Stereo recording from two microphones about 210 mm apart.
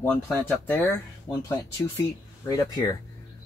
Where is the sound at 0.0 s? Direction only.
5° left (ahead or behind).